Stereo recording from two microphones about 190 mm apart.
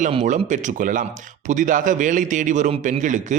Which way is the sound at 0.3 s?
40° right (ahead or behind).